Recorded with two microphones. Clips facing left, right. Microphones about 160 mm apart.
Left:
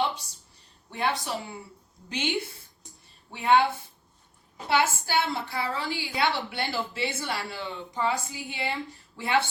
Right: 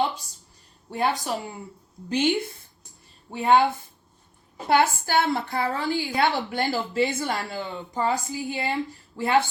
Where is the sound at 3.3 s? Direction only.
40° right (ahead or behind).